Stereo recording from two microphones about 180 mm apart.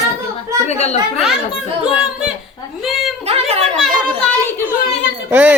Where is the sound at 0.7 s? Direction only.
35° left (ahead or behind).